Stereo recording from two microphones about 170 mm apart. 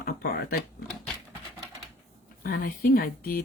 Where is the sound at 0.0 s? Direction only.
65° left (ahead or behind).